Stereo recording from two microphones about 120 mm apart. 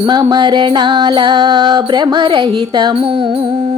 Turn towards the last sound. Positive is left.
turn(degrees=-40)  # may be behind; listen again after turning